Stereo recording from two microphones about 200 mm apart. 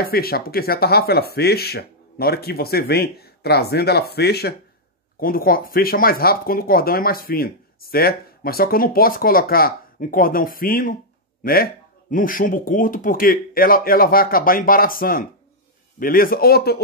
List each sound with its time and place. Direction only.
0.0 s speech: 50° left (ahead or behind)